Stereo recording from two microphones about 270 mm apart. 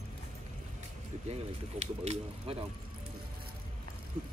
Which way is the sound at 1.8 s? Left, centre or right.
Right.